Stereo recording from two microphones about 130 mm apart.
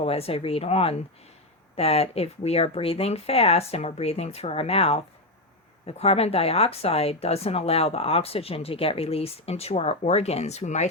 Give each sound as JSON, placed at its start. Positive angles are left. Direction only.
{"t": 0.0, "sound": "speech", "side_deg": 50}